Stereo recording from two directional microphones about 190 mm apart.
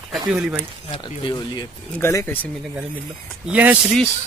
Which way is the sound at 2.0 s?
15° left (ahead or behind).